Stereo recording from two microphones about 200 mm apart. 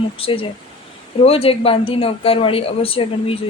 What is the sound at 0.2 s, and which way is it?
Speech, 25° left (ahead or behind).